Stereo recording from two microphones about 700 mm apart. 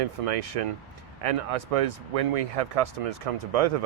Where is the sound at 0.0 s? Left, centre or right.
Right.